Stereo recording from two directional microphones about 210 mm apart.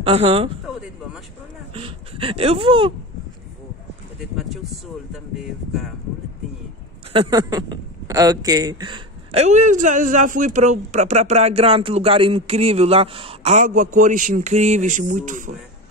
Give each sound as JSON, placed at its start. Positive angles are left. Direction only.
{"t": 0.0, "sound": "a man's voice", "side_deg": -30}
{"t": 1.7, "sound": "speech", "side_deg": -25}
{"t": 4.2, "sound": "a sound", "side_deg": 0}
{"t": 5.1, "sound": "speech", "side_deg": 0}
{"t": 7.1, "sound": "a man's voice", "side_deg": -20}